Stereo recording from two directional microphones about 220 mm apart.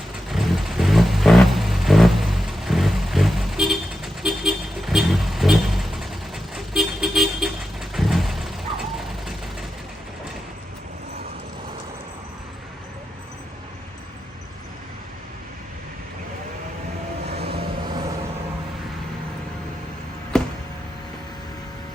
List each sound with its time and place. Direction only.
0.3 s vehicle: centre (ahead or behind)
17.2 s vehicle: 45° right (ahead or behind)
20.3 s a sound: 5° left (ahead or behind)